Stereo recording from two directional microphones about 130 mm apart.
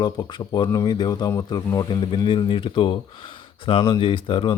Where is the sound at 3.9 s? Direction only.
40° left (ahead or behind).